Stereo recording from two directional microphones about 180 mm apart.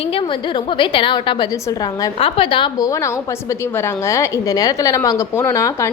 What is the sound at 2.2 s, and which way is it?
A woman's voice, 30° left (ahead or behind).